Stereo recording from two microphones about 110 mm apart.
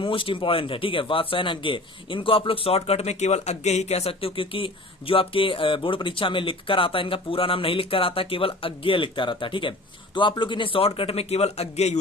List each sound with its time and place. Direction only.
0.0 s a man's voice: 50° left (ahead or behind); by 11.9 s 80° left